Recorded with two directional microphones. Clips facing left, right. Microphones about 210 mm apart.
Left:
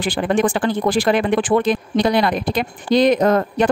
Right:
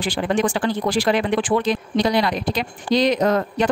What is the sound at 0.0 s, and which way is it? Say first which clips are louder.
Speech: left 3 dB; 55° left (ahead or behind).